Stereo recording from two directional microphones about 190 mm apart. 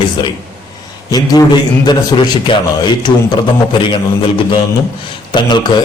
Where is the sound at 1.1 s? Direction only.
20° left (ahead or behind).